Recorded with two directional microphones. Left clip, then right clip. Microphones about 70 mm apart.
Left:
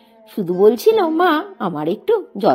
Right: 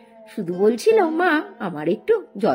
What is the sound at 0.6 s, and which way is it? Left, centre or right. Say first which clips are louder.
A woman's voice: left 3 dB; left.